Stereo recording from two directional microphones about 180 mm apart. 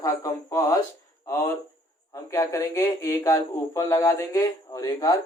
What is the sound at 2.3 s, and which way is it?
Speech, 20° left (ahead or behind).